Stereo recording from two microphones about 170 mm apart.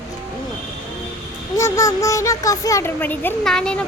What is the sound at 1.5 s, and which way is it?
Speech, 20° left (ahead or behind).